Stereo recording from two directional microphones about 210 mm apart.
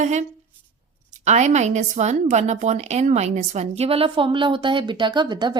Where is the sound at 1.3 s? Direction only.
35° right (ahead or behind).